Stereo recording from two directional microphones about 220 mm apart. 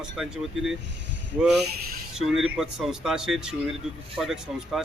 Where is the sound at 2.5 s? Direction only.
Centre (ahead or behind).